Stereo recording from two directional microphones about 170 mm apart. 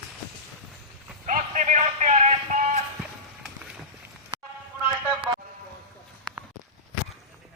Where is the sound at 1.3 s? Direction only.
45° right (ahead or behind).